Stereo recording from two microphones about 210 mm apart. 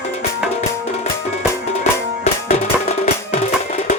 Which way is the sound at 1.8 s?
30° left (ahead or behind).